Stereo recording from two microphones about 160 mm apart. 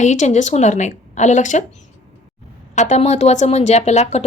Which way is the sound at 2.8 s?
45° left (ahead or behind).